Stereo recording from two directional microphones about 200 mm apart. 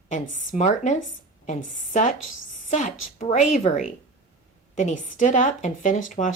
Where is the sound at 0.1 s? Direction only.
40° left (ahead or behind).